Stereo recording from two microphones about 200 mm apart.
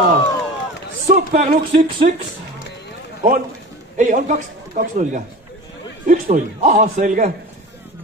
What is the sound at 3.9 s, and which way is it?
Speech, 40° right (ahead or behind).